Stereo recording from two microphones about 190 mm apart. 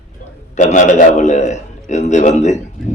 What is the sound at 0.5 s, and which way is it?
A man's voice, 40° left (ahead or behind).